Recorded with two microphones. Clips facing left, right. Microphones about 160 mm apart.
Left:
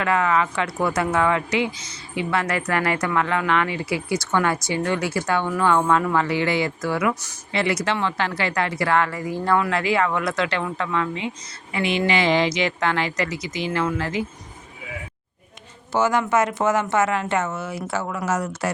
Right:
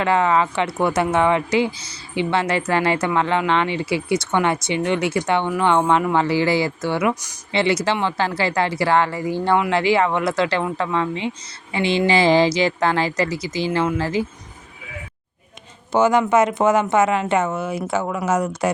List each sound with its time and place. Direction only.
0.0 s speech: 30° right (ahead or behind)
6.2 s speech: 30° right (ahead or behind)
7.1 s speech: 15° right (ahead or behind)
7.5 s speech: 25° right (ahead or behind)
15.9 s speech: 20° right (ahead or behind)